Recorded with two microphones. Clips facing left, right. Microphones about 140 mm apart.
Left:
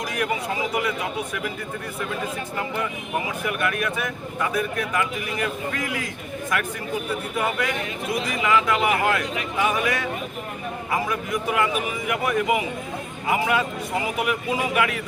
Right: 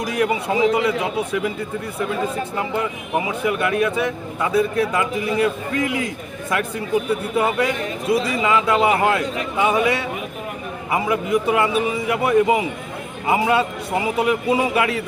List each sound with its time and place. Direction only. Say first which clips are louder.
0.0 s speech: right 5 dB; 30° right (ahead or behind)
2.6 s speech: right 3 dB; 25° right (ahead or behind)
7.3 s speech: right 5 dB; 25° right (ahead or behind)